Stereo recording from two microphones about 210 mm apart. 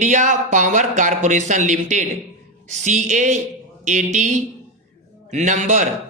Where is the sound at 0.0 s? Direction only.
35° right (ahead or behind).